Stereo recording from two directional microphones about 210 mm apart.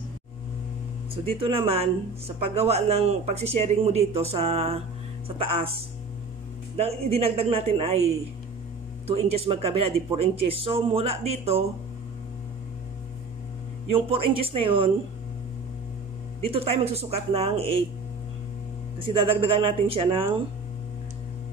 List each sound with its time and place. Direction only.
1.1 s speech: 25° right (ahead or behind)
6.8 s speech: 30° right (ahead or behind)
9.0 s speech: 30° right (ahead or behind)
13.9 s speech: 25° right (ahead or behind)
16.4 s speech: 30° right (ahead or behind)
18.9 s speech: 25° right (ahead or behind)